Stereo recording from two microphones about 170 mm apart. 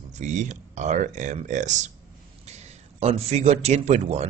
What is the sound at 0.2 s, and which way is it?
Speech, 45° right (ahead or behind).